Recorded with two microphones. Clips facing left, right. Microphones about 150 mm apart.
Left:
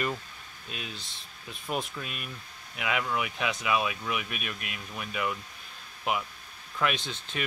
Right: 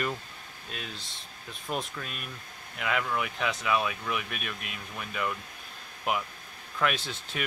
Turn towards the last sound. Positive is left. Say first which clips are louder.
# even
turn(degrees=-5)  # may be behind; listen again after turning